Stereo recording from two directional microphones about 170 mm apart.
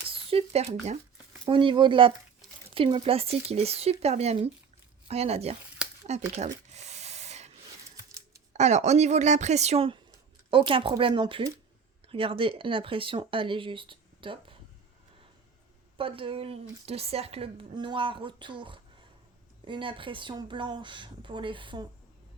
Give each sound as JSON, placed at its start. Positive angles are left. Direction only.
{"t": 0.1, "sound": "a woman's voice", "side_deg": -35}
{"t": 6.1, "sound": "a sound", "side_deg": -40}
{"t": 8.5, "sound": "a woman's voice", "side_deg": -40}
{"t": 16.0, "sound": "a woman's voice", "side_deg": -30}